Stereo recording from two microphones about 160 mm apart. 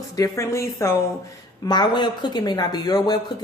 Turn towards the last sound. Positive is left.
turn(degrees=25)  # may be behind; listen again after turning